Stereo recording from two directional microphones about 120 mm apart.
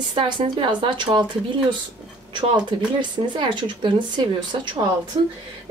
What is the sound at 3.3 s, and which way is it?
A woman's voice, 40° right (ahead or behind).